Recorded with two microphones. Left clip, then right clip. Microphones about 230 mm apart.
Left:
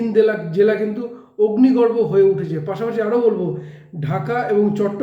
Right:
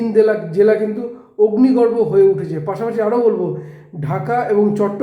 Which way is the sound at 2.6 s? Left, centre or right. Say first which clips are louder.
Right 3 dB; centre.